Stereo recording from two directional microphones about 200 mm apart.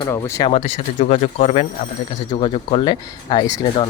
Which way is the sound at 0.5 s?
35° left (ahead or behind).